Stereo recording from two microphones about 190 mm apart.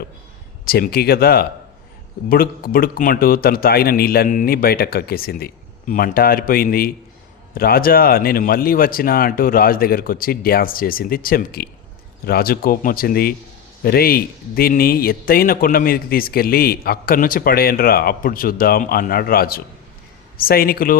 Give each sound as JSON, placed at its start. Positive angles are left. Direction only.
{"t": 0.6, "sound": "speech", "side_deg": 55}